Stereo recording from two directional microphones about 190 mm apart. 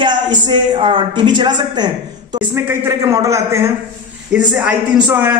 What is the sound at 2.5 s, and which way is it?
A man's voice, 10° right (ahead or behind).